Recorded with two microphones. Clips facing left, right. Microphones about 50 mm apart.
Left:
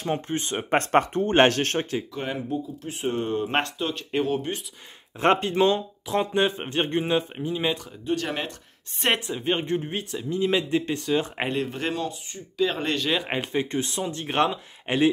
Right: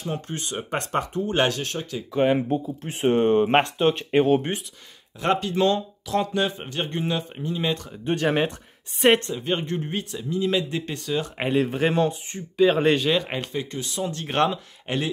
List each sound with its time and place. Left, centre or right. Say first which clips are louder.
0.1 s speech: left 4 dB; left
2.3 s speech: right 5 dB; right
5.2 s speech: left 2 dB; left
5.6 s speech: even; centre
8.0 s speech: right 7 dB; right
9.0 s speech: right 6 dB; centre
9.4 s speech: left 1 dB; left
10.3 s speech: left 1 dB; left
11.4 s speech: right 5 dB; centre
11.9 s speech: right 7 dB; right
12.5 s speech: right 6 dB; centre
13.5 s speech: left 4 dB; left
14.2 s speech: right 1 dB; centre